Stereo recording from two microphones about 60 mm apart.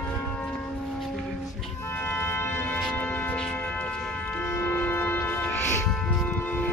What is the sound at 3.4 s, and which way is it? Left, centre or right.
Music, left.